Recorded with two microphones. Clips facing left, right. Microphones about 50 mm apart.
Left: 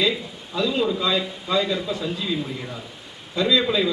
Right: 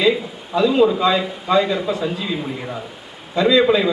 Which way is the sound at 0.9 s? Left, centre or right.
Right.